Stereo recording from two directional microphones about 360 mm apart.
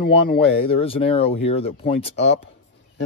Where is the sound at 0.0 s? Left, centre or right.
Left.